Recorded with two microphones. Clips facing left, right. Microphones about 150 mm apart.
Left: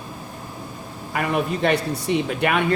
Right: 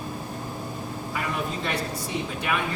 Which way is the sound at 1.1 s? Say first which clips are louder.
Left 8 dB; 70° left (ahead or behind).